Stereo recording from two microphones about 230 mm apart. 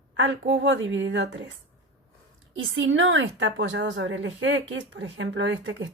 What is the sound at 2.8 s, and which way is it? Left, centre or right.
A woman's voice, right.